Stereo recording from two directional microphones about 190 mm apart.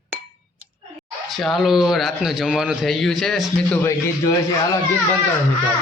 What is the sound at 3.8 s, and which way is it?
Speech, 15° left (ahead or behind).